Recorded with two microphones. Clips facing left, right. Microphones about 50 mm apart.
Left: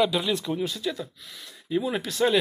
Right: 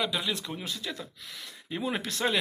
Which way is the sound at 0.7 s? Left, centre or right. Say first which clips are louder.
Left 6 dB; centre.